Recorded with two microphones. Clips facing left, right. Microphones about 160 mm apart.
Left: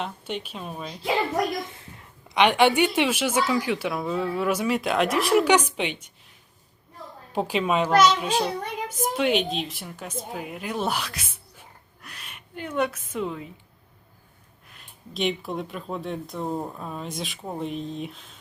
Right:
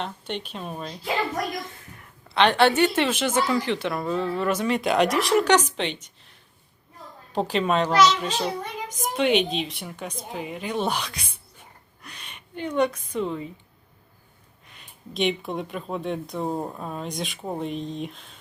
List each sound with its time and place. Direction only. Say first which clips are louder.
0.0 s a woman's voice: even; 5° left (ahead or behind)
1.7 s a woman's voice: left 1 dB; 20° left (ahead or behind)
7.3 s a woman's voice: right 1 dB; 10° left (ahead or behind)
7.9 s a child's voice: left 1 dB; 50° left (ahead or behind)
8.2 s a woman's voice: left 2 dB; 10° left (ahead or behind)
14.7 s a woman's voice: right 2 dB; centre (ahead or behind)